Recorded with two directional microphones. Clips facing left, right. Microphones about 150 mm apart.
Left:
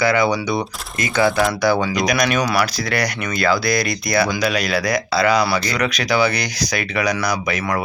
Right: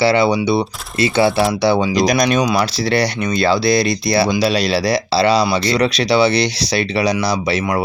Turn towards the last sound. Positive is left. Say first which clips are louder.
# right 4 dB
turn(degrees=-30)  # may be behind; listen again after turning